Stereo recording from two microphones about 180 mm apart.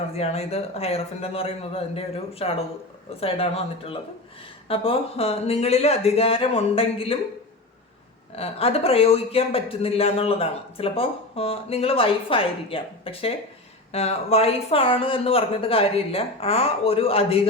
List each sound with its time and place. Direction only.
0.1 s speech: 35° left (ahead or behind)
8.4 s speech: 35° left (ahead or behind)